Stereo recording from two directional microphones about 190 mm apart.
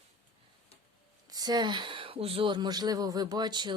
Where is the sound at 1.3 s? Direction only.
20° right (ahead or behind).